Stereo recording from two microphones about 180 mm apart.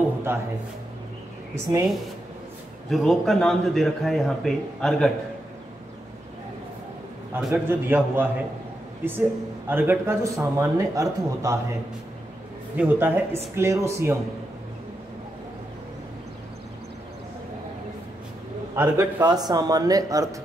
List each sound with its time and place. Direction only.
0.3 s speech: 10° right (ahead or behind)
1.5 s speech: 15° right (ahead or behind)
2.9 s speech: centre (ahead or behind)
7.3 s speech: 10° right (ahead or behind)
9.7 s speech: 10° right (ahead or behind)
12.7 s speech: 10° right (ahead or behind)
18.8 s speech: 15° right (ahead or behind)